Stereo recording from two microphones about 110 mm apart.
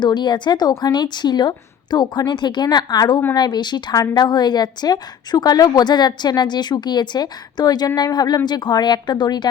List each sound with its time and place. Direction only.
0.0 s a woman's voice: 45° left (ahead or behind)